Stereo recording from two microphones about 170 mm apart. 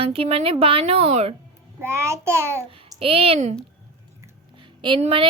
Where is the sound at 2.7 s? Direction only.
30° right (ahead or behind).